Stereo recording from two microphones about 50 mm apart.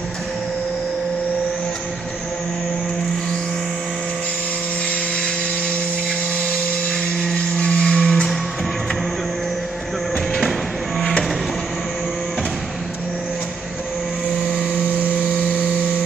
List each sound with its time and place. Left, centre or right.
6.9 s a sound: centre
8.1 s music: centre
11.0 s music: centre